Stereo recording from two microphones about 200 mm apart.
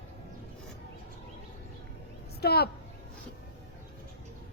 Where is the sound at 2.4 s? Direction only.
50° left (ahead or behind).